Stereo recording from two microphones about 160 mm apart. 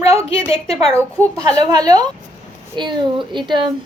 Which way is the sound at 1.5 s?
25° right (ahead or behind).